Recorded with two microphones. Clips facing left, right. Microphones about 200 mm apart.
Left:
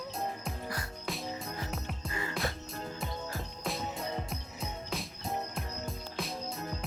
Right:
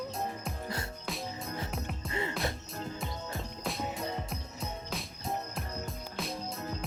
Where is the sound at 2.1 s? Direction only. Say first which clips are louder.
Right 5 dB; 25° right (ahead or behind).